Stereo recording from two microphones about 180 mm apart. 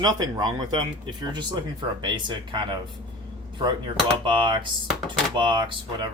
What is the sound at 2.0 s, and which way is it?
Speech, 25° right (ahead or behind).